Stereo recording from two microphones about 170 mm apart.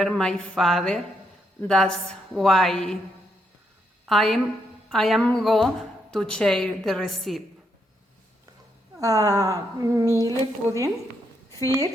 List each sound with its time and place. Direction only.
0.0 s a woman's voice: 5° left (ahead or behind)
4.0 s a woman's voice: centre (ahead or behind)
9.0 s a woman's voice: 20° right (ahead or behind)